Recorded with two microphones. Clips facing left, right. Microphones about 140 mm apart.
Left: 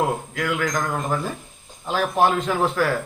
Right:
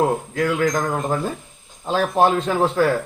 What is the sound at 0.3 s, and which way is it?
Speech, 30° right (ahead or behind).